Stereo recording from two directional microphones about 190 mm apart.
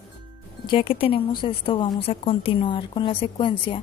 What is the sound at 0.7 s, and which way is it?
A woman's voice, 30° left (ahead or behind).